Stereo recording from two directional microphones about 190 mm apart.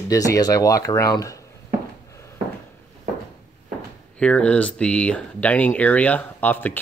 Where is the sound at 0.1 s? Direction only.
20° left (ahead or behind).